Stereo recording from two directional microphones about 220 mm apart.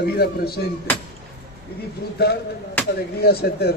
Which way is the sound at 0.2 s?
45° left (ahead or behind).